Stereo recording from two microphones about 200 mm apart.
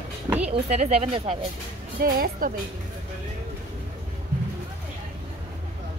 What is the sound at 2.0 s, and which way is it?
Speech, 45° right (ahead or behind).